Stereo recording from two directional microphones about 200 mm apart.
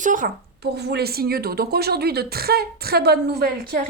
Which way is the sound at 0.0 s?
40° right (ahead or behind).